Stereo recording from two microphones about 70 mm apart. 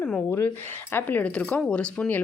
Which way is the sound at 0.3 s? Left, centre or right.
Left.